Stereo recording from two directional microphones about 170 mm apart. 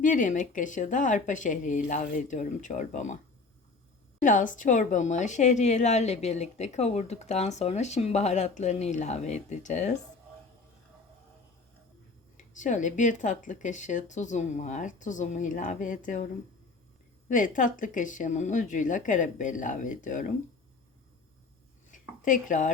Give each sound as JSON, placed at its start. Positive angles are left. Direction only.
{"t": 0.0, "sound": "a woman's voice", "side_deg": 50}
{"t": 4.2, "sound": "a woman's voice", "side_deg": 50}
{"t": 12.4, "sound": "a woman's voice", "side_deg": 45}
{"t": 17.2, "sound": "a woman's voice", "side_deg": 50}
{"t": 21.8, "sound": "a sound", "side_deg": 50}